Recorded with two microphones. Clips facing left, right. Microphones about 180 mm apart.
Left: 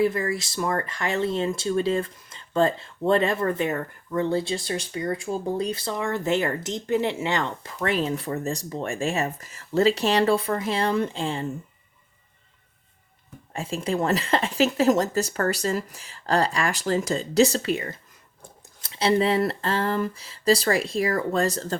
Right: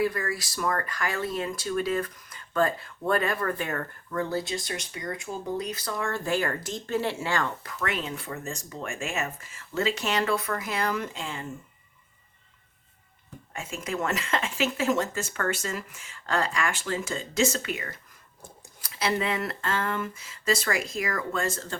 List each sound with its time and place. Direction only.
0.0 s speech: 25° left (ahead or behind)
13.5 s speech: 30° left (ahead or behind)